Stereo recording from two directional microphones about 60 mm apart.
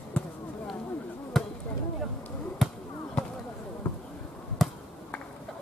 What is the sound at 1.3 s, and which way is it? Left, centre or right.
Chop, centre.